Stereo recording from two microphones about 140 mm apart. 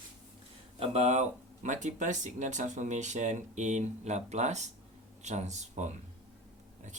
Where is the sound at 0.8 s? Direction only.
50° right (ahead or behind).